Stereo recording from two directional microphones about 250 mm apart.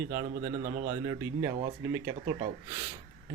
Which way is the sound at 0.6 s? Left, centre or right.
Right.